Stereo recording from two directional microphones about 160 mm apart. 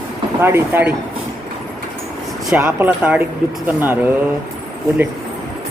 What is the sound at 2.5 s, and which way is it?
Speech, 10° right (ahead or behind).